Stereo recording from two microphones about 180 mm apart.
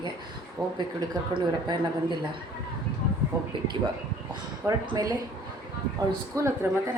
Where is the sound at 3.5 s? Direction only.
25° right (ahead or behind).